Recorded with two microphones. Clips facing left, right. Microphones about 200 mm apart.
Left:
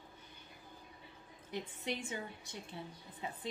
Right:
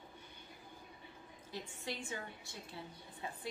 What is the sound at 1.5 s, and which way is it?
A woman's voice, 20° left (ahead or behind).